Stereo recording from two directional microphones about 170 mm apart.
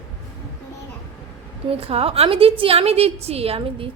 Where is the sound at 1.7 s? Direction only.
35° right (ahead or behind).